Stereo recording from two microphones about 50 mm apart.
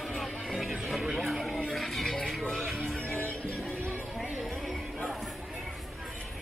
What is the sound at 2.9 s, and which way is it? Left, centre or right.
Music, left.